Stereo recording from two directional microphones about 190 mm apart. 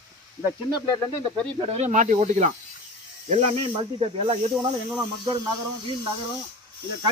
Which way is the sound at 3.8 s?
30° right (ahead or behind).